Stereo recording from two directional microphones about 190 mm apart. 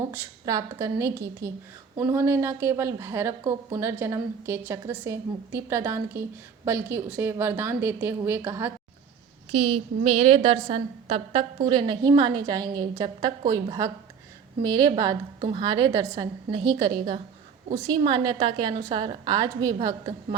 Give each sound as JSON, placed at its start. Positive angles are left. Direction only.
{"t": 0.1, "sound": "a woman's voice", "side_deg": -20}
{"t": 9.5, "sound": "a woman's voice", "side_deg": -30}